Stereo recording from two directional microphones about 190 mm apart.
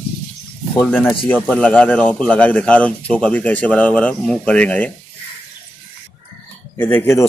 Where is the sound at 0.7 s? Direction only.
5° left (ahead or behind).